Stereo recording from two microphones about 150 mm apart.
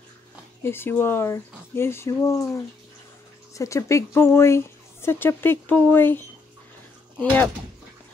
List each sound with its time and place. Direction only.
0.7 s speech: 15° left (ahead or behind)
3.5 s speech: 20° left (ahead or behind)